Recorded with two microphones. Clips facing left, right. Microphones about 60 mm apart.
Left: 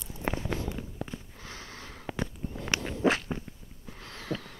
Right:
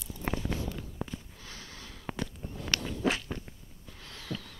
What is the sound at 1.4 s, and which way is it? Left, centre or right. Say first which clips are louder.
Sniff: left 3 dB; left.